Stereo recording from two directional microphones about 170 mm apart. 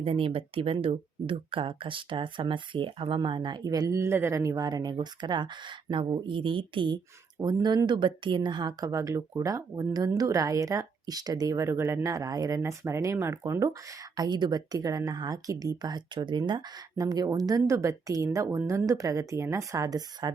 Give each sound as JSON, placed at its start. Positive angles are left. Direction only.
{"t": 0.0, "sound": "speech", "side_deg": -30}